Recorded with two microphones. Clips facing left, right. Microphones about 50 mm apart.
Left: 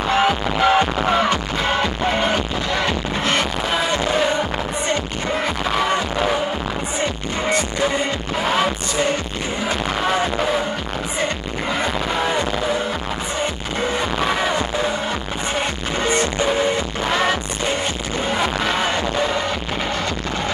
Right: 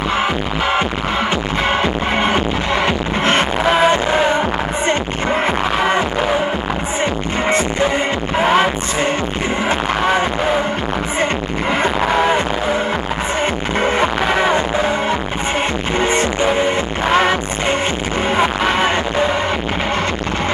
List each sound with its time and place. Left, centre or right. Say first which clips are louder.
1.3 s music: right 3 dB; right
11.7 s music: right 6 dB; right